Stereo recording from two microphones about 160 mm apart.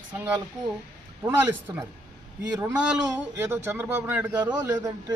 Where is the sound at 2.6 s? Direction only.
15° right (ahead or behind).